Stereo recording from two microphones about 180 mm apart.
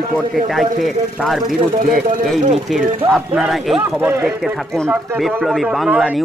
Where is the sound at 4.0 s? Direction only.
15° right (ahead or behind).